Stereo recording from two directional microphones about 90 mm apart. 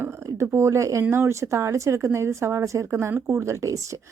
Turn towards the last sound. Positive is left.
turn(degrees=-35)  # may be behind; listen again after turning